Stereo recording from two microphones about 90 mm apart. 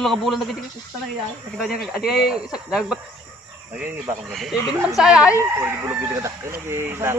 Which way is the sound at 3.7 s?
15° right (ahead or behind).